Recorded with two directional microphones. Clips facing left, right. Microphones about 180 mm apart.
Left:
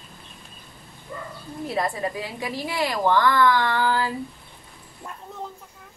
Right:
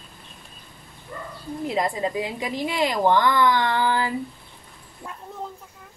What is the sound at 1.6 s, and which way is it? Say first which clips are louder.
A woman's voice: right 1 dB; 20° right (ahead or behind).